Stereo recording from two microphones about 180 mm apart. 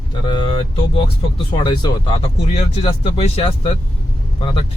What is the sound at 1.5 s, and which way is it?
Speech, 25° left (ahead or behind).